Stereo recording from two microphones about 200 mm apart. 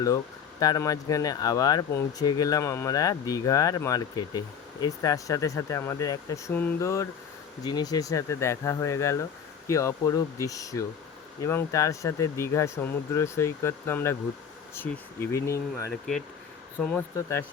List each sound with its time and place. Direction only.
0.6 s speech: 20° left (ahead or behind)
15.9 s speech: centre (ahead or behind)
16.9 s speech: 15° left (ahead or behind)